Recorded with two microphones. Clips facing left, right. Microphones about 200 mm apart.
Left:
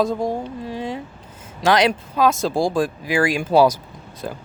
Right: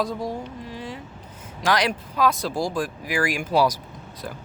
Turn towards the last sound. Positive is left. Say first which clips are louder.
# left 6 dB
turn(degrees=25)  # may be behind; listen again after turning